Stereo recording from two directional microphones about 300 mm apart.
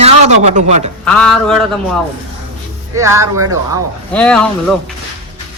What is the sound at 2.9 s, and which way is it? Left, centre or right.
Speech, centre.